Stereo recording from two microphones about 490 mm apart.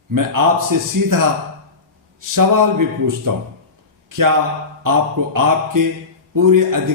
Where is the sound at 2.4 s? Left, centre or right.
Right.